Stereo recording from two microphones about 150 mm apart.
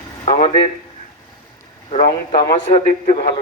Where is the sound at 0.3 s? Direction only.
35° left (ahead or behind).